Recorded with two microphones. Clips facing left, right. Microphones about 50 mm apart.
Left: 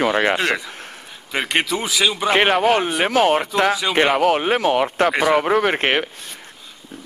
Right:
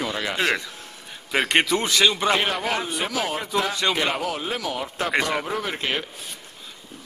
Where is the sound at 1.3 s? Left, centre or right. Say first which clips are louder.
Even; centre.